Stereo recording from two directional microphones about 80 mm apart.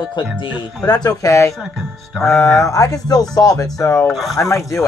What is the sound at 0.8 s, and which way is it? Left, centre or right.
Speech, left.